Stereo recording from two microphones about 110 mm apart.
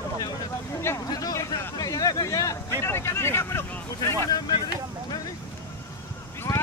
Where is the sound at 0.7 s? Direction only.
25° left (ahead or behind).